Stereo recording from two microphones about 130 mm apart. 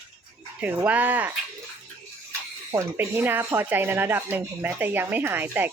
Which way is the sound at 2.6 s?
20° right (ahead or behind).